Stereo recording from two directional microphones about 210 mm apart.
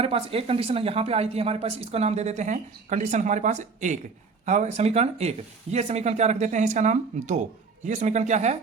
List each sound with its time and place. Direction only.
0.0 s speech: 25° right (ahead or behind)